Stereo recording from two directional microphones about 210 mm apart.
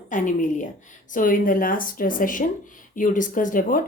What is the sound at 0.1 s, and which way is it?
Speech, 35° left (ahead or behind).